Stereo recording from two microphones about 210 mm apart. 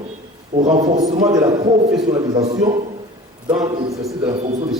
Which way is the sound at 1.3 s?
20° right (ahead or behind).